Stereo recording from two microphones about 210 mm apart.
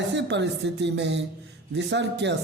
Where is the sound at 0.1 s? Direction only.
55° right (ahead or behind).